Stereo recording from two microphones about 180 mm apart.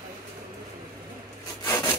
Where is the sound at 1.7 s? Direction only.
15° left (ahead or behind).